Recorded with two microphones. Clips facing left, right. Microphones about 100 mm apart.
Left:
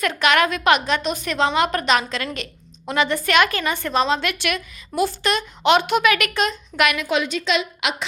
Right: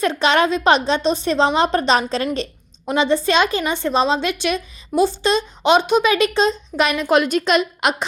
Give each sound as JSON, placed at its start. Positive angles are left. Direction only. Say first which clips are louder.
{"t": 0.0, "sound": "a woman's voice", "louder": "right 2 dB", "side_deg": -25}
{"t": 7.1, "sound": "a woman's voice", "louder": "right 5 dB", "side_deg": -50}